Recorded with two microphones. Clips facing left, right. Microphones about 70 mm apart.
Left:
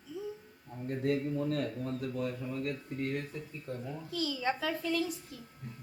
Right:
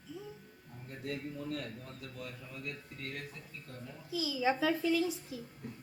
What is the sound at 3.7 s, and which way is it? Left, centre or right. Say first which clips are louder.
Speech: left 11 dB; left.